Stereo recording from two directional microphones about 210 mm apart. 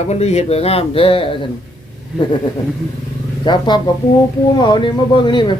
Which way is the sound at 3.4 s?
20° left (ahead or behind).